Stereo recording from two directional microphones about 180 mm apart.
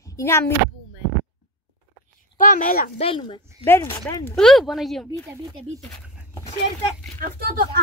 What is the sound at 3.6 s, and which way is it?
Speech, 15° left (ahead or behind).